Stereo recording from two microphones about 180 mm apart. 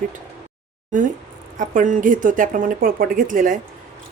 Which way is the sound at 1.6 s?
45° right (ahead or behind).